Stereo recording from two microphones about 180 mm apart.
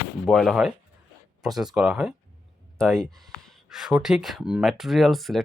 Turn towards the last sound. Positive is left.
turn(degrees=0)  # may be behind; listen again after turning